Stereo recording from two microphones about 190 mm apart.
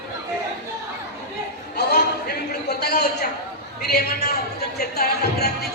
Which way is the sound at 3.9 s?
55° left (ahead or behind).